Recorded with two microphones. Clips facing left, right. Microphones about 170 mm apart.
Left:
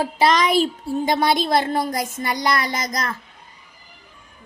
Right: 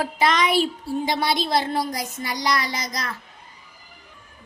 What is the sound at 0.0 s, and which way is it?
A woman's voice, 35° left (ahead or behind).